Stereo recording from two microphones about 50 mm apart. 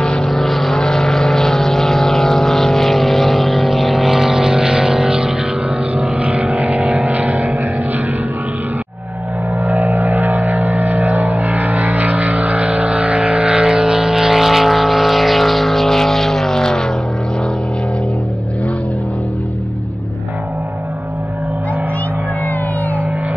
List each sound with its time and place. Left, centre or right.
0.0 s vehicle: centre
0.3 s vehicle: centre
5.9 s vehicle: right
9.7 s vehicle: right; by 16.8 s centre